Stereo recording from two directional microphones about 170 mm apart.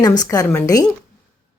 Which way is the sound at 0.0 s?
20° left (ahead or behind).